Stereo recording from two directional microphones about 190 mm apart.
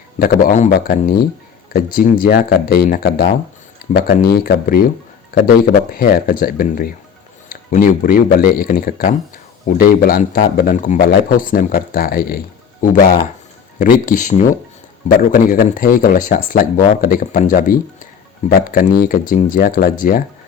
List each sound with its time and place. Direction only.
0.2 s speech: 45° left (ahead or behind)
13.7 s speech: 45° left (ahead or behind)